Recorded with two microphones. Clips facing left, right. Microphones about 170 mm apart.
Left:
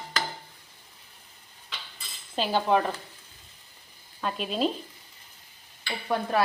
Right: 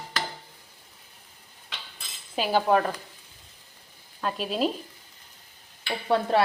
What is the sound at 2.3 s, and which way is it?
Cutlery, 10° right (ahead or behind).